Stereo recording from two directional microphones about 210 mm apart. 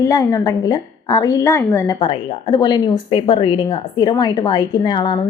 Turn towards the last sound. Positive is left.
turn(degrees=20)  # may be behind; listen again after turning